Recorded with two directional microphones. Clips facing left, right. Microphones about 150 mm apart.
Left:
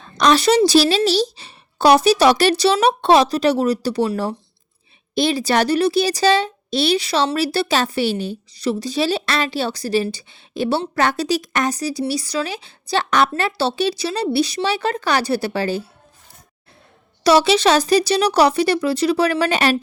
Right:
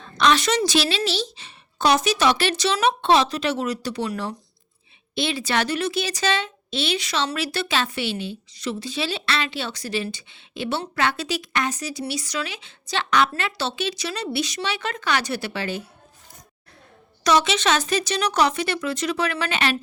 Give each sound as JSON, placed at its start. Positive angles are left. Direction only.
{"t": 0.2, "sound": "speech", "side_deg": 35}
{"t": 17.2, "sound": "speech", "side_deg": 35}